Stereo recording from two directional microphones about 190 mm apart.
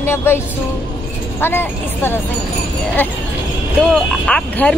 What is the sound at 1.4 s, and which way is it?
Speech, 10° left (ahead or behind).